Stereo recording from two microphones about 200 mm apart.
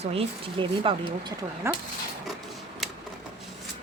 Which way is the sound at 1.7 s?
15° right (ahead or behind).